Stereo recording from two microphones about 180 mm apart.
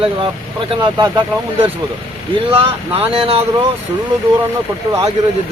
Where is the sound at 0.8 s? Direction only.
25° right (ahead or behind).